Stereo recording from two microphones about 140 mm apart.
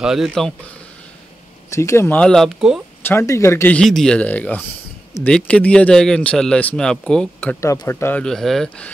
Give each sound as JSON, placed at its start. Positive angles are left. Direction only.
{"t": 0.0, "sound": "speech", "side_deg": -5}
{"t": 1.7, "sound": "speech", "side_deg": 20}
{"t": 3.0, "sound": "speech", "side_deg": 15}
{"t": 3.7, "sound": "speech", "side_deg": 5}